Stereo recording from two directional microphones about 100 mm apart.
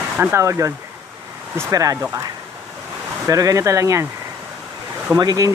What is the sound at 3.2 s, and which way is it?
Speech, 35° right (ahead or behind).